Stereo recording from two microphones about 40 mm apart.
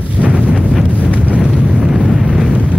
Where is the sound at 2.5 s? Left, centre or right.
Right.